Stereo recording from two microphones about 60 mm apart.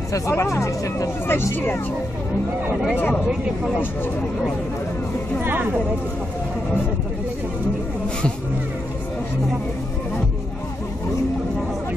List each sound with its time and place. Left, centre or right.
0.1 s speech: left
1.2 s speech: left
5.4 s speech: right